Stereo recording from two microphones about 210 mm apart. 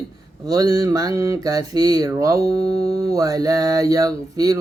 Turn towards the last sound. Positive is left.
turn(degrees=-15)  # may be behind; listen again after turning